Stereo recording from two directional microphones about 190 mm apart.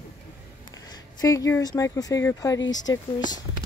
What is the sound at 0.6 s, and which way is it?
Speech, 20° left (ahead or behind).